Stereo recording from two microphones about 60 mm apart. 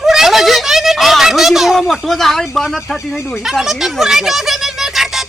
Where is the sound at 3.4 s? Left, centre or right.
Centre.